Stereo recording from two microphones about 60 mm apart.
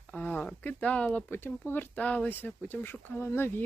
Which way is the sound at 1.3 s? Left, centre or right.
Left.